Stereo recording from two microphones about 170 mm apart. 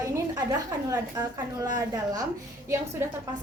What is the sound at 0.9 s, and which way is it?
A woman's voice, 25° right (ahead or behind).